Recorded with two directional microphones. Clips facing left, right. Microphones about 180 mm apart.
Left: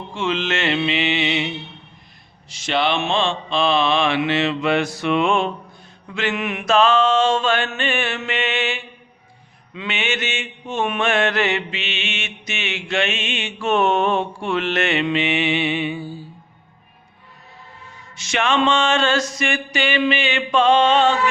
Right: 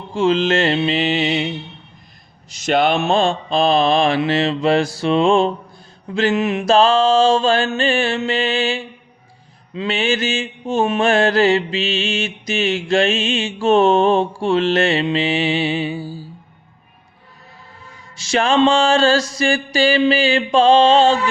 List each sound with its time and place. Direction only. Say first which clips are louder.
0.1 s mantra: right 7 dB; 35° right (ahead or behind)
18.2 s mantra: right 5 dB; 35° right (ahead or behind)